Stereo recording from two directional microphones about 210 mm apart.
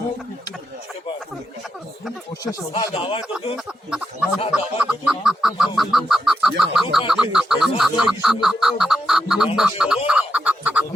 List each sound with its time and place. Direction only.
2.4 s speech: 15° left (ahead or behind)
4.5 s chicken: 5° right (ahead or behind)
7.1 s a sound: centre (ahead or behind)
9.6 s chicken: 5° right (ahead or behind)